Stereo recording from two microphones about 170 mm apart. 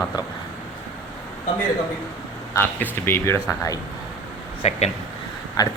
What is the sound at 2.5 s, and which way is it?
Speech, 15° left (ahead or behind).